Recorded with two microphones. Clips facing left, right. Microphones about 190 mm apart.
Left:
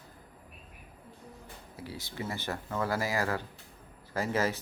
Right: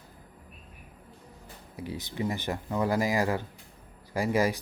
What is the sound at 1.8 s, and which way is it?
Speech, 20° right (ahead or behind).